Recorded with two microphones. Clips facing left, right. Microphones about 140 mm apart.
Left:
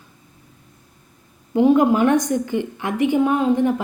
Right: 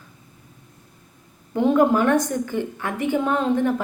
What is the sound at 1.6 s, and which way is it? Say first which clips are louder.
A woman's voice: left 3 dB; 15° left (ahead or behind).